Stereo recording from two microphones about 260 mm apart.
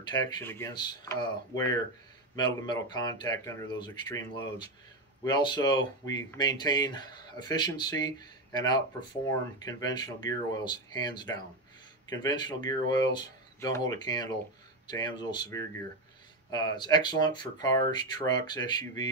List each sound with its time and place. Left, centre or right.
0.0 s speech: centre
2.3 s speech: centre